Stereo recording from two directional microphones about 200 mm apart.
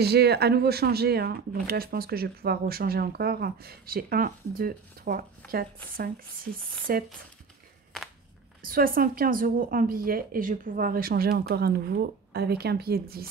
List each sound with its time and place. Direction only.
0.0 s speech: 55° right (ahead or behind)
8.6 s speech: 45° right (ahead or behind)